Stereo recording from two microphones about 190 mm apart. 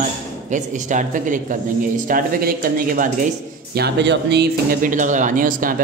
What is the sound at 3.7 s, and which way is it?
A man's voice, 60° right (ahead or behind).